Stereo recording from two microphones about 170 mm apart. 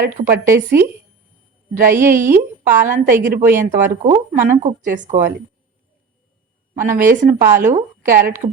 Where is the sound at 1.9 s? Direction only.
15° right (ahead or behind).